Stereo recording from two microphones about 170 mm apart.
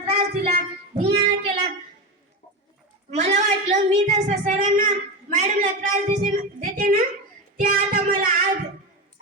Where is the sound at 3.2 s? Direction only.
40° right (ahead or behind).